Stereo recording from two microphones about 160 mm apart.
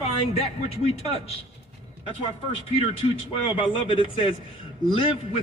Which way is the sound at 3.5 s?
30° left (ahead or behind).